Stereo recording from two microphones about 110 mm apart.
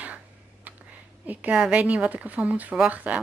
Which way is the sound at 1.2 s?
10° right (ahead or behind).